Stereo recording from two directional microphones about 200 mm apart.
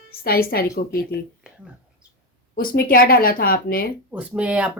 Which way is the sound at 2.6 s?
45° left (ahead or behind).